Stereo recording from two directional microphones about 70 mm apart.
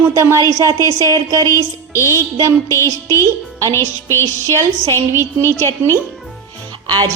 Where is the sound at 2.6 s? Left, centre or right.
Left.